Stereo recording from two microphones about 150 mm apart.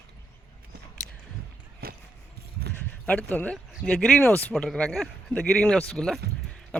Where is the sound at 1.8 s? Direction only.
90° right.